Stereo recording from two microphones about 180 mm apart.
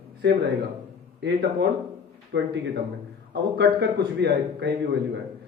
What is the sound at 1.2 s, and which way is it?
Speech, 65° right (ahead or behind).